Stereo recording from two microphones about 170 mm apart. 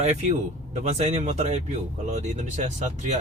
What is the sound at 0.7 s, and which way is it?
Speech, 40° right (ahead or behind).